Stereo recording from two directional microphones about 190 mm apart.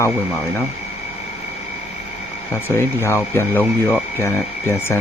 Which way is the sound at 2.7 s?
15° left (ahead or behind).